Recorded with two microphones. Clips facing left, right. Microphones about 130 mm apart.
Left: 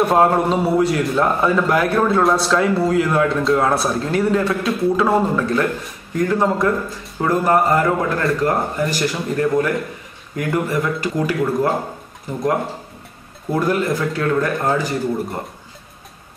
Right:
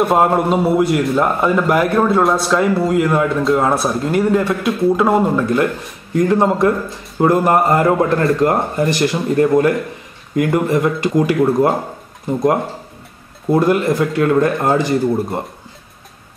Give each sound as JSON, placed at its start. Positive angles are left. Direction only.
{"t": 0.0, "sound": "a man's voice", "side_deg": -5}
{"t": 13.5, "sound": "speech", "side_deg": -20}